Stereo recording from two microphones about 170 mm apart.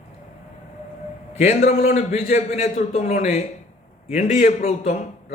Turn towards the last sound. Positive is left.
turn(degrees=45)  # may be behind; listen again after turning